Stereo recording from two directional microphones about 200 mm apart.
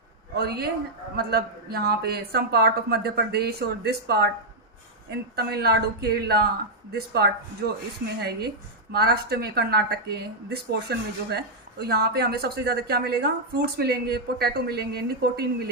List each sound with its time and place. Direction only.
0.3 s a woman's voice: 50° right (ahead or behind)
5.4 s a woman's voice: 55° right (ahead or behind)